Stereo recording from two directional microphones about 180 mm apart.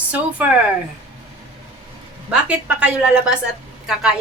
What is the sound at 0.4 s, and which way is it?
Speech, 10° right (ahead or behind).